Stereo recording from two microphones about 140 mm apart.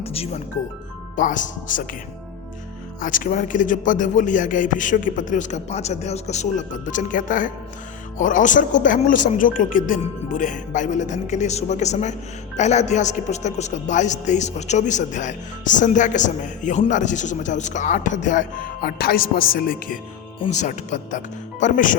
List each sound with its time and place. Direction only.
0.0 s music: 45° left (ahead or behind)
1.1 s speech: 65° left (ahead or behind)
3.0 s speech: 70° left (ahead or behind)
10.3 s speech: 65° left (ahead or behind); by 20.0 s 90° left
20.5 s speech: 55° left (ahead or behind)